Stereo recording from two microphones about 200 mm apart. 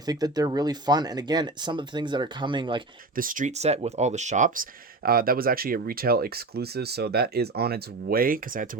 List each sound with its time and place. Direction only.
0.0 s speech: 20° right (ahead or behind)
3.2 s speech: 40° right (ahead or behind)